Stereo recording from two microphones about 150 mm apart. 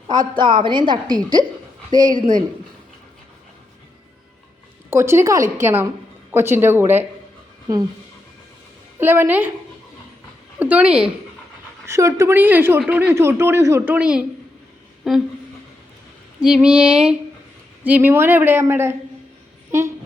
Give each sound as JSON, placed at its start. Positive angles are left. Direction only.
{"t": 0.1, "sound": "a woman's voice", "side_deg": -30}
{"t": 4.9, "sound": "speech", "side_deg": -15}
{"t": 9.0, "sound": "speech", "side_deg": -15}
{"t": 10.6, "sound": "speech", "side_deg": -10}
{"t": 11.9, "sound": "speech", "side_deg": -20}
{"t": 15.1, "sound": "a sound", "side_deg": 0}
{"t": 16.4, "sound": "speech", "side_deg": -5}